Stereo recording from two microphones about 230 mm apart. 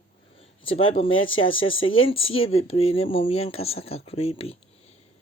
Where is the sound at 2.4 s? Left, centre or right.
Left.